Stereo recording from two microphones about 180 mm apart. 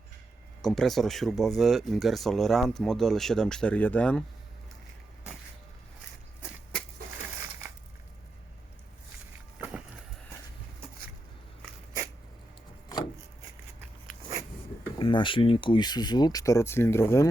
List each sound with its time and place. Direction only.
0.6 s speech: centre (ahead or behind)
12.9 s wood: 20° left (ahead or behind)
14.9 s speech: 25° left (ahead or behind)